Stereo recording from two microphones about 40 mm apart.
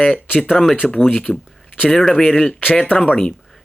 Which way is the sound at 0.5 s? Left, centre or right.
Centre.